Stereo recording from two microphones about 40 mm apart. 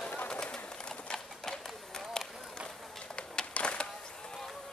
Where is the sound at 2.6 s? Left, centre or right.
Centre.